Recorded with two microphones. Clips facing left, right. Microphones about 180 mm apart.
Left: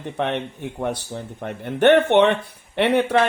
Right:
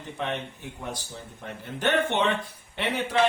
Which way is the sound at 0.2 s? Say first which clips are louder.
Left 7 dB; 65° left (ahead or behind).